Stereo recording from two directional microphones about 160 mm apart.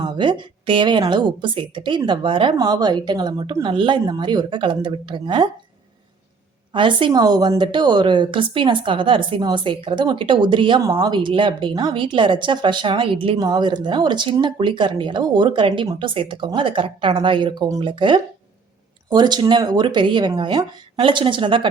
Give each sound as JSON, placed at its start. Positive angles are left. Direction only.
{"t": 0.0, "sound": "a woman's voice", "side_deg": -30}
{"t": 6.7, "sound": "a woman's voice", "side_deg": -30}